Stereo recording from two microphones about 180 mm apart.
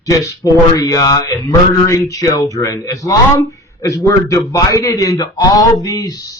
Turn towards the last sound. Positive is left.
turn(degrees=20)  # may be behind; listen again after turning